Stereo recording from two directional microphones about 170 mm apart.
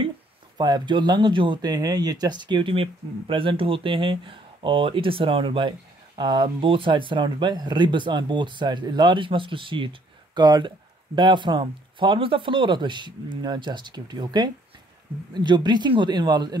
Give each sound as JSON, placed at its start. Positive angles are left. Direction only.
{"t": 0.6, "sound": "speech", "side_deg": -25}